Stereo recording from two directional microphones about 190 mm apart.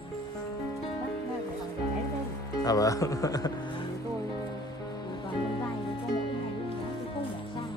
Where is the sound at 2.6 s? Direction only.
20° left (ahead or behind).